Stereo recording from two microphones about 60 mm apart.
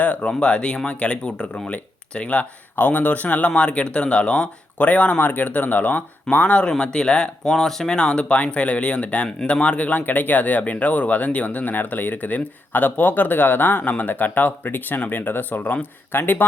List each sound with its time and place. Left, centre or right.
0.0 s speech: left